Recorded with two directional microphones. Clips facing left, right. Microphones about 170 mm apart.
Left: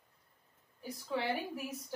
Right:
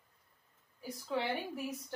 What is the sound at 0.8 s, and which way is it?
Speech, centre (ahead or behind).